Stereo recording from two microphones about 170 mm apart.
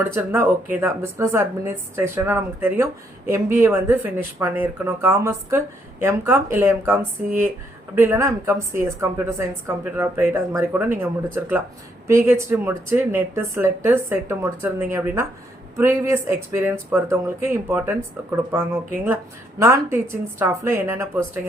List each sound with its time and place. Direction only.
0.0 s speech: 15° right (ahead or behind)